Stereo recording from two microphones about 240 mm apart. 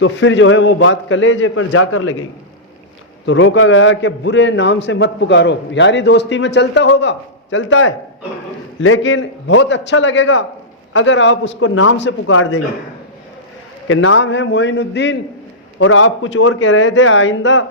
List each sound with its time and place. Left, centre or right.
0.0 s a man's voice: left
3.2 s a man's voice: left
13.8 s a man's voice: left